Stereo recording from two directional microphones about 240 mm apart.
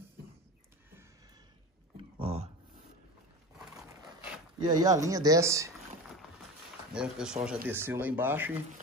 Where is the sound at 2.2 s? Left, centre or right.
Right.